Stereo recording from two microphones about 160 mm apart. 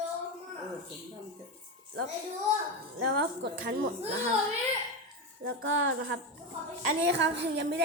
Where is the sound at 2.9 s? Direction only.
90° right.